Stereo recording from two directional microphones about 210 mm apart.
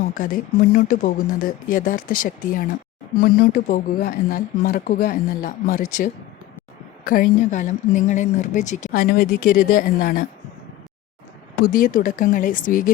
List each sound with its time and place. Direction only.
0.1 s a woman's voice: 40° left (ahead or behind)
11.6 s a woman's voice: 40° left (ahead or behind)